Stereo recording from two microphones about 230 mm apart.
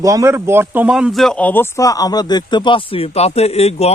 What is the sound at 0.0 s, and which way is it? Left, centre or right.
Speech, centre.